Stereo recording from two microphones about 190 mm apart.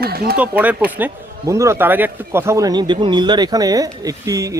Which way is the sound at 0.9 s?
10° right (ahead or behind).